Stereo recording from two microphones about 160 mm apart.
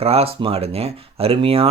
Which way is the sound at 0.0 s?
40° right (ahead or behind).